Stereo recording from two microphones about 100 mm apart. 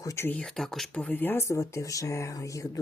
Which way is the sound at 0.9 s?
15° left (ahead or behind).